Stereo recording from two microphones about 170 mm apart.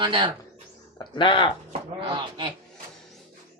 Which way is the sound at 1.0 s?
30° left (ahead or behind).